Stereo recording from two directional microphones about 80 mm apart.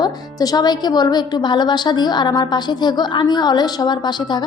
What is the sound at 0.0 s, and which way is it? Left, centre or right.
A woman's voice, left.